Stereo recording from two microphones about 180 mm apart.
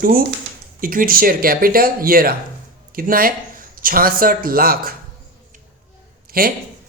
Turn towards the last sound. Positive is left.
turn(degrees=-55)  # may be behind; listen again after turning